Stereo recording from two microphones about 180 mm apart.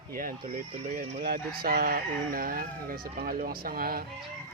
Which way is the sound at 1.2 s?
60° right (ahead or behind).